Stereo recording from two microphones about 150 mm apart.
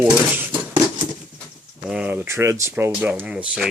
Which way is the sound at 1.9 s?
10° right (ahead or behind).